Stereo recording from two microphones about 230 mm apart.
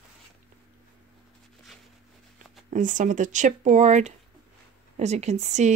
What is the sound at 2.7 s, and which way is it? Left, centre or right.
Speech, right.